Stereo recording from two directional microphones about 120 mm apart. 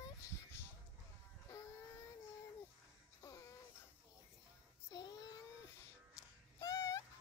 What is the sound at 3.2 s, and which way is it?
Baby cry, 25° left (ahead or behind).